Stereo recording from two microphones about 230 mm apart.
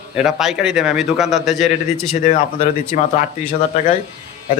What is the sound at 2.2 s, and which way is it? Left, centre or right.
Speech, left.